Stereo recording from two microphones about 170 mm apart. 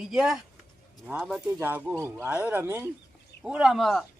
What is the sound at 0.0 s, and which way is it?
Speech, 5° right (ahead or behind).